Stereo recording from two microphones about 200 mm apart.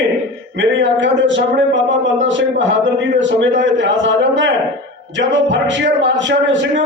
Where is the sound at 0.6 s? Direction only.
65° right (ahead or behind).